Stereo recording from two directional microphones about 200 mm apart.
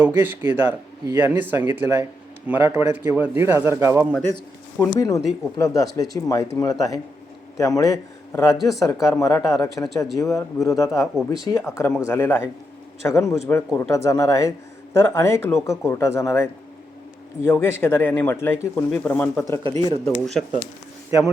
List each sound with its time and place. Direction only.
0.0 s speech: 10° right (ahead or behind)
4.8 s speech: 15° left (ahead or behind)
8.5 s speech: centre (ahead or behind)
8.9 s speech: 15° left (ahead or behind)
20.1 s speech: centre (ahead or behind)